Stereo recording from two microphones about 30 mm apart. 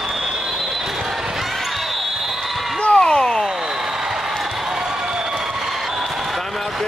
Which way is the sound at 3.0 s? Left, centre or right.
Left.